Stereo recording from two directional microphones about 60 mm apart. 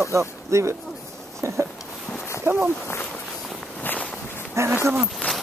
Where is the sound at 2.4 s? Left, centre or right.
Right.